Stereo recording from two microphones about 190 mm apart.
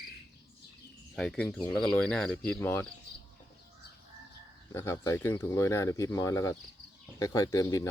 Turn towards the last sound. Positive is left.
turn(degrees=20)  # may be behind; listen again after turning